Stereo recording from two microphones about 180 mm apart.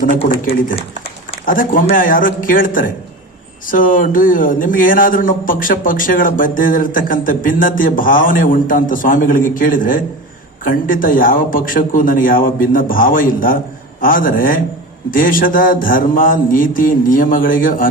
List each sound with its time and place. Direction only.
1.5 s a man's voice: 50° left (ahead or behind)